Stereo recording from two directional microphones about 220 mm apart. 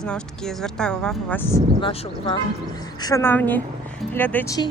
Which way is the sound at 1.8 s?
20° left (ahead or behind).